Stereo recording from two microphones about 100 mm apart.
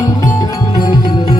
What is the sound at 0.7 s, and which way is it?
Music, 45° left (ahead or behind).